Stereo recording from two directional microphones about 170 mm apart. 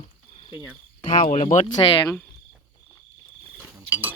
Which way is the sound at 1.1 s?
45° left (ahead or behind).